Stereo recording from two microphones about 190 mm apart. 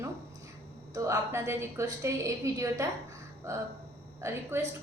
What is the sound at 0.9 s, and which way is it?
A woman's voice, 15° right (ahead or behind).